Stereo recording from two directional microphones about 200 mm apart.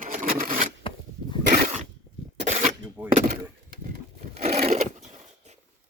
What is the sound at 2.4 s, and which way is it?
Shuffling cards, 35° right (ahead or behind).